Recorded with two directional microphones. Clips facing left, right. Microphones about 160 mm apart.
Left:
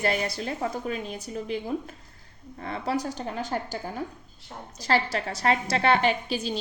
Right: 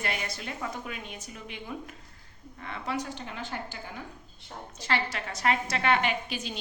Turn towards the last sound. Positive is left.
turn(degrees=35)  # may be behind; listen again after turning